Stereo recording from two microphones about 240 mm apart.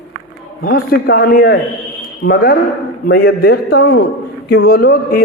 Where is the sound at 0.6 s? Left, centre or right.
Left.